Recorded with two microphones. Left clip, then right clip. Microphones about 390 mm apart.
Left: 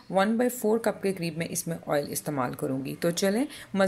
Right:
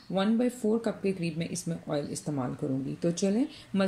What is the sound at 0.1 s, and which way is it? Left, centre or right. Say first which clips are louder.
Speech: left 4 dB; centre.